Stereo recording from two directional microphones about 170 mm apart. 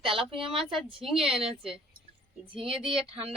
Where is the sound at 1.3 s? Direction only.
35° right (ahead or behind).